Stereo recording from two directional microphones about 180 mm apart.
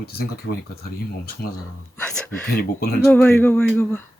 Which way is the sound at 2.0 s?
10° left (ahead or behind).